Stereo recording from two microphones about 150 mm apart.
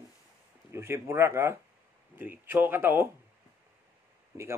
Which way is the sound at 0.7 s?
15° right (ahead or behind).